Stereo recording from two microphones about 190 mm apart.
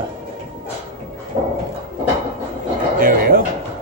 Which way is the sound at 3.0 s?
50° right (ahead or behind).